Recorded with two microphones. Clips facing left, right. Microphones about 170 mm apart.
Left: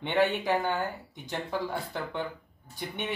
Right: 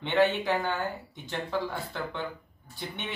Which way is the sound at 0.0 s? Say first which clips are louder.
Right 1 dB; 15° left (ahead or behind).